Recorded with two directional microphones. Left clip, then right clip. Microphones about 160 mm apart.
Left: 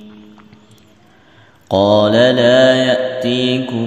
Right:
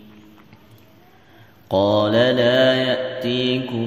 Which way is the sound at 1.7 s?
35° left (ahead or behind).